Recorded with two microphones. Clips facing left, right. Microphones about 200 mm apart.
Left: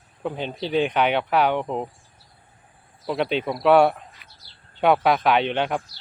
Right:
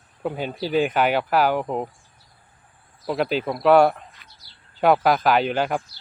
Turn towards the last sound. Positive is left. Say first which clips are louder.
# right 1 dB
turn(degrees=0)  # may be behind; listen again after turning